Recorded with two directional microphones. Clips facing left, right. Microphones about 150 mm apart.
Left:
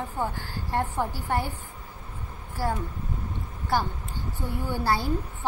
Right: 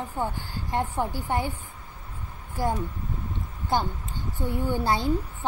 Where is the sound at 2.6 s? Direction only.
15° right (ahead or behind).